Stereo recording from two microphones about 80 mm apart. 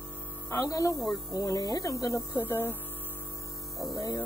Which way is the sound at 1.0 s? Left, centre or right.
Centre.